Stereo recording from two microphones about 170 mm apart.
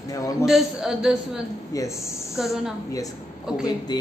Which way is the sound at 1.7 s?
15° left (ahead or behind).